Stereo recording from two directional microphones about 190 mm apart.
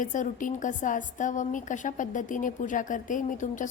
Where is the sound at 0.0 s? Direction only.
40° left (ahead or behind).